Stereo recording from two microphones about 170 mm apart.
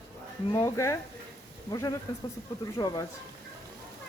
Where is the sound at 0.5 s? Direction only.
20° left (ahead or behind).